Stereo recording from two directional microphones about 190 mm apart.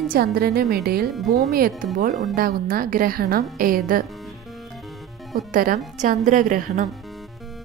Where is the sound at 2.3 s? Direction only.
50° right (ahead or behind).